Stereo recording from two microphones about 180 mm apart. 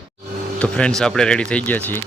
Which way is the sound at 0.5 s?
5° left (ahead or behind).